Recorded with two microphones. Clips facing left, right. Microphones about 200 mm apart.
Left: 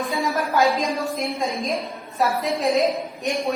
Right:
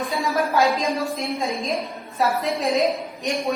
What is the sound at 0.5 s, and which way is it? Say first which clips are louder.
A woman's voice: left 2 dB; centre (ahead or behind).